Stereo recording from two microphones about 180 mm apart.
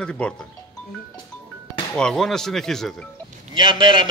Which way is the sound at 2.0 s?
5° left (ahead or behind).